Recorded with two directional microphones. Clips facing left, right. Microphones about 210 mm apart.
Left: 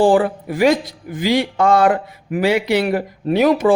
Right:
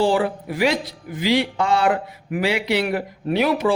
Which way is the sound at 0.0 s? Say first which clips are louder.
Left 5 dB; 50° left (ahead or behind).